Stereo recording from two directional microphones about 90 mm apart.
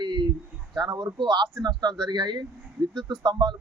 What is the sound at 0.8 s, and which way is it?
Speech, 55° right (ahead or behind).